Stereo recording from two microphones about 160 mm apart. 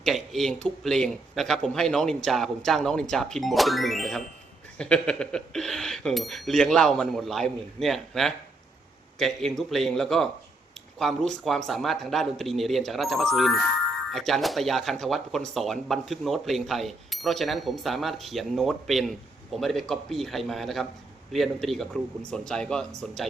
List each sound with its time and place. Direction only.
0.0 s speech: centre (ahead or behind)